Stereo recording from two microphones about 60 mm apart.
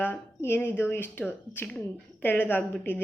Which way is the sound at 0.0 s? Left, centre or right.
Left.